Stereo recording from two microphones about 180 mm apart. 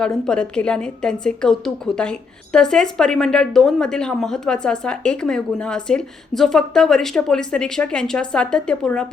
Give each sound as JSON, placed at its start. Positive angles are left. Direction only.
{"t": 0.0, "sound": "a woman's voice", "side_deg": 5}